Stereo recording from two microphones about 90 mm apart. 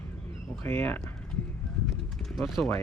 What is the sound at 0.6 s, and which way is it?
Speech, 25° left (ahead or behind).